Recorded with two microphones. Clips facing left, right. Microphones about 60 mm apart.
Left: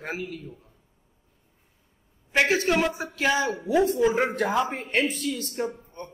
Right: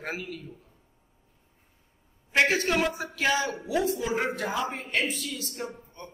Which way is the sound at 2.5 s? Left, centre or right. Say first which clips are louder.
Left 3 dB; left.